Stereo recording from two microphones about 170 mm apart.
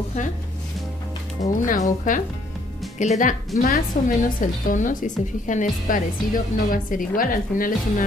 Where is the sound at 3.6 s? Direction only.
55° left (ahead or behind).